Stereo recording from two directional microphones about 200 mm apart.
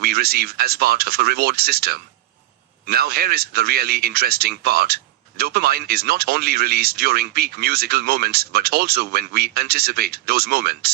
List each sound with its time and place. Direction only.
0.0 s speech: 50° right (ahead or behind)